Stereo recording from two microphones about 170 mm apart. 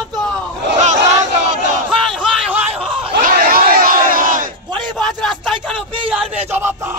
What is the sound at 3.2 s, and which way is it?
Crowd, 60° right (ahead or behind).